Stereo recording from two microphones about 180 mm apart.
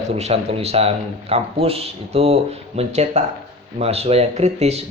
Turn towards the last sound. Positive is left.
turn(degrees=-35)  # may be behind; listen again after turning